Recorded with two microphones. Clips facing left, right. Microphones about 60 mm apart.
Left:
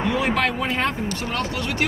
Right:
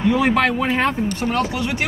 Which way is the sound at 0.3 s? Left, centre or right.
Centre.